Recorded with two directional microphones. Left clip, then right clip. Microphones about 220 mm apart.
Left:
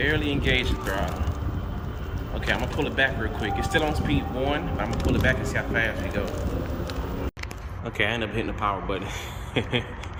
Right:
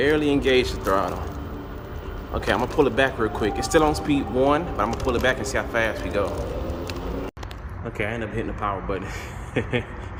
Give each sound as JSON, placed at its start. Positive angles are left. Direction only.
{"t": 0.0, "sound": "speech", "side_deg": -25}
{"t": 2.3, "sound": "speech", "side_deg": -25}
{"t": 7.9, "sound": "speech", "side_deg": 0}